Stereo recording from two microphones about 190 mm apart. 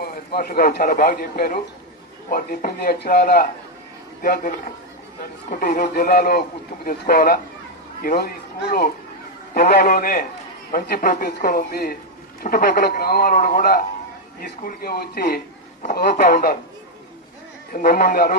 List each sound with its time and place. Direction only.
0.0 s a man's voice: 55° left (ahead or behind)
9.6 s a man's voice: 55° left (ahead or behind)
17.7 s a man's voice: 50° left (ahead or behind)